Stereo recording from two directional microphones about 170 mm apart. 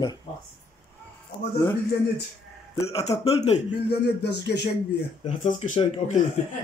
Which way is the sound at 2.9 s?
35° left (ahead or behind).